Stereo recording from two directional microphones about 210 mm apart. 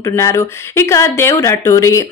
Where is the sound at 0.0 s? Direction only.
15° left (ahead or behind).